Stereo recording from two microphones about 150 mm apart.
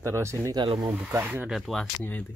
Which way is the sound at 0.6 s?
35° right (ahead or behind).